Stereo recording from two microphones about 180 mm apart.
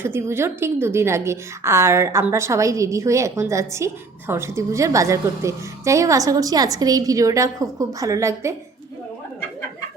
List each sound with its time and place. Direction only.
0.0 s a woman's voice: 15° right (ahead or behind)